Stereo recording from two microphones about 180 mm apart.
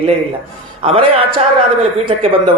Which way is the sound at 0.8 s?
30° right (ahead or behind).